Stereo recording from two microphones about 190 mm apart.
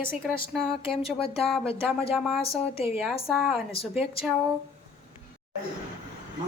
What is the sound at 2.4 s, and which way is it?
Speech, 30° left (ahead or behind).